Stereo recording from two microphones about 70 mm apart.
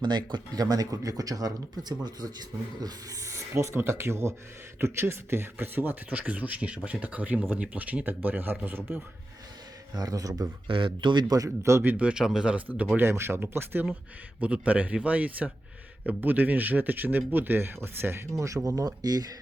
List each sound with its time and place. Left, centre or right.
0.0 s speech: right
2.8 s speech: right
9.9 s speech: right
11.0 s a man's voice: right
11.4 s speech: right
11.8 s a man's voice: right
13.0 s speech: right
14.4 s speech: centre
18.3 s speech: right